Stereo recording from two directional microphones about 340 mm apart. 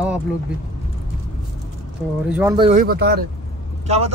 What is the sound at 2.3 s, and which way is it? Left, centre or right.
Speech, centre.